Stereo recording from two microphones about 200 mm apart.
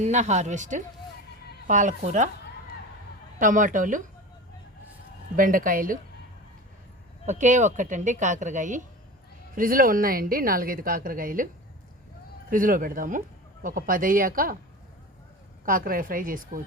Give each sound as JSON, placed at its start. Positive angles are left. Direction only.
{"t": 0.0, "sound": "a woman's voice", "side_deg": -35}
{"t": 3.3, "sound": "a woman's voice", "side_deg": -40}
{"t": 5.4, "sound": "speech", "side_deg": -45}
{"t": 7.3, "sound": "a woman's voice", "side_deg": -40}
{"t": 12.5, "sound": "speech", "side_deg": -45}
{"t": 15.6, "sound": "speech", "side_deg": -45}